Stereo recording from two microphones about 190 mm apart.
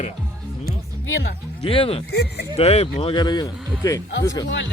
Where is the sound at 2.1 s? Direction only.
60° left (ahead or behind).